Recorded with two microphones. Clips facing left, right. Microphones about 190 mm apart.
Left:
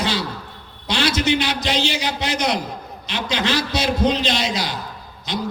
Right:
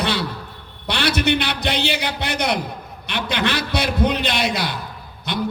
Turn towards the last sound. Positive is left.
turn(degrees=-60)  # may be behind; listen again after turning